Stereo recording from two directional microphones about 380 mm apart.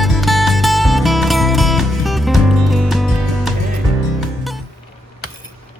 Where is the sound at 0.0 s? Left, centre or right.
Centre.